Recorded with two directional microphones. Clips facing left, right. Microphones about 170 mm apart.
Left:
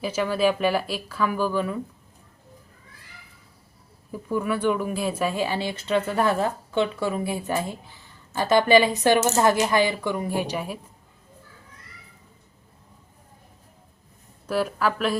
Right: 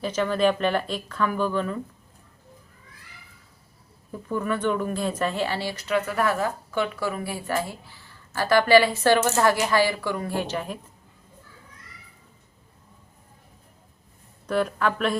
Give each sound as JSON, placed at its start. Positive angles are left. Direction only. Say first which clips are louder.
{"t": 0.0, "sound": "speech", "louder": "even", "side_deg": 10}
{"t": 4.1, "sound": "speech", "louder": "left 1 dB", "side_deg": 10}
{"t": 14.4, "sound": "speech", "louder": "even", "side_deg": 5}